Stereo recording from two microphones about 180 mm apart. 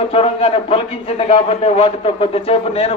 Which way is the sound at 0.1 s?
30° left (ahead or behind).